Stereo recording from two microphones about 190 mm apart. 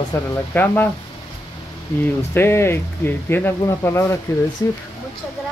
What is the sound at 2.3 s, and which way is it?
Speech, 15° left (ahead or behind).